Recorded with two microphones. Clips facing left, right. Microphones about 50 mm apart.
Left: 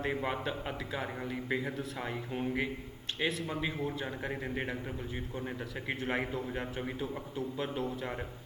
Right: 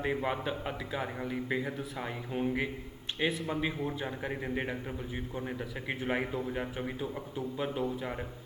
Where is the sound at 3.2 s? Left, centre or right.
Right.